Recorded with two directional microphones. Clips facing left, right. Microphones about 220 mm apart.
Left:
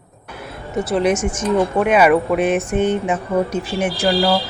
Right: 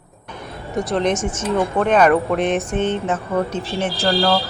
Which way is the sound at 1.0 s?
15° left (ahead or behind).